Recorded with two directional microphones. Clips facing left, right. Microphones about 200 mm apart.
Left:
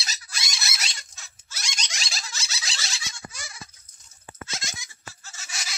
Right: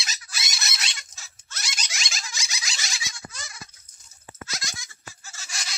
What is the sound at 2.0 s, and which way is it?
Squeak, 35° left (ahead or behind).